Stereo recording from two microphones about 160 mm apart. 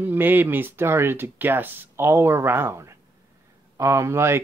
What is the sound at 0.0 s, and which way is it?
A man's voice, 10° right (ahead or behind).